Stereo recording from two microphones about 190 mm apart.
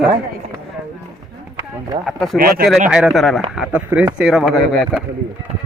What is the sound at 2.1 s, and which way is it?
Speech, centre (ahead or behind).